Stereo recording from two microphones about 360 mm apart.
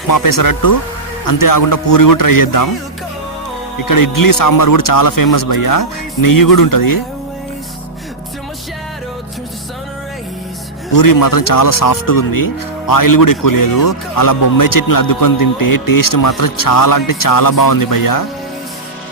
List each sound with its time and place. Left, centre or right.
0.1 s a man's voice: left
3.8 s a man's voice: left
10.9 s a man's voice: left